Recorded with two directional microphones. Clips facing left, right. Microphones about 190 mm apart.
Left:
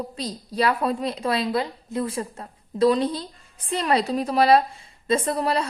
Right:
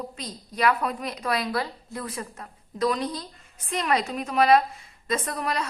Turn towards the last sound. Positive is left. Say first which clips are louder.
# left 6 dB
turn(degrees=30)  # may be behind; listen again after turning